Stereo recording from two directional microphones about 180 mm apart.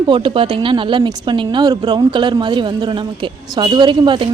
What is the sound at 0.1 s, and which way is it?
Speech, 25° right (ahead or behind).